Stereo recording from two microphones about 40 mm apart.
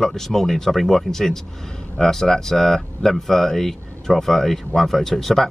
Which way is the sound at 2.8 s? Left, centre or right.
Centre.